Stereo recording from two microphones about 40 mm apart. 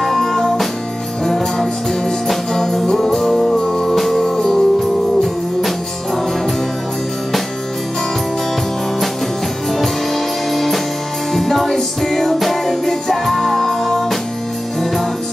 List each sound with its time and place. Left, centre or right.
0.0 s music: centre
3.5 s music: centre
3.8 s music: centre
4.4 s music: centre
9.7 s music: centre